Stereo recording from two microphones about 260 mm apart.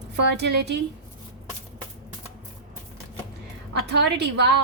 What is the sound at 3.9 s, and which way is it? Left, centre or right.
Speech, right.